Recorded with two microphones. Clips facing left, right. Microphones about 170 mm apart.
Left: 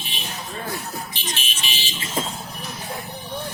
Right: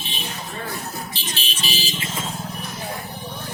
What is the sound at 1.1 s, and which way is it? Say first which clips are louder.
Vehicle: even; 35° right (ahead or behind).